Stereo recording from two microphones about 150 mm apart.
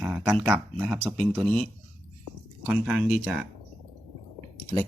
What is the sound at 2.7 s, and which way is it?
Speech, 5° right (ahead or behind).